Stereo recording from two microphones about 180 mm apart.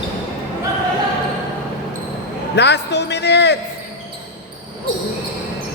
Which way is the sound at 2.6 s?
70° left (ahead or behind).